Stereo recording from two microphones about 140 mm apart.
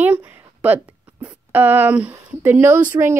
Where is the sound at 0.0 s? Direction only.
10° right (ahead or behind).